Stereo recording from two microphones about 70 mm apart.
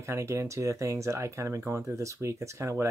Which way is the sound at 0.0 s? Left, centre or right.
Right.